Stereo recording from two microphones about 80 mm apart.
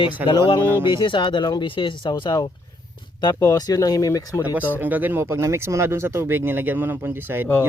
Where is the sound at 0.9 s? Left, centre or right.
Left.